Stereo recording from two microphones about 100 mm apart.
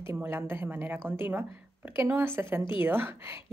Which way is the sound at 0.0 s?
25° right (ahead or behind).